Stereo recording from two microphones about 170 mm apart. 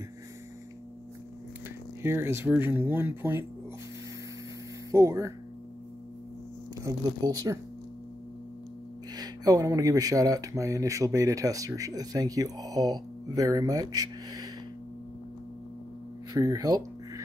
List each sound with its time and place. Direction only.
2.0 s speech: 15° right (ahead or behind)
4.9 s speech: 20° right (ahead or behind)
6.8 s speech: 20° right (ahead or behind)
9.1 s speech: 25° right (ahead or behind)
16.3 s speech: 20° right (ahead or behind)